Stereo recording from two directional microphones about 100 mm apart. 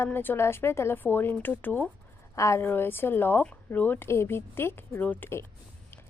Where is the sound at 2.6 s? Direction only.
20° left (ahead or behind).